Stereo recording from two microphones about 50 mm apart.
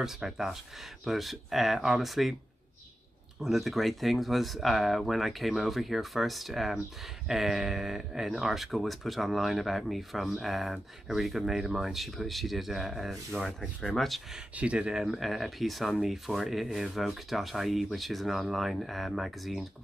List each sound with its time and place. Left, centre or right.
0.0 s speech: centre
3.3 s speech: centre
14.5 s speech: right
15.0 s speech: centre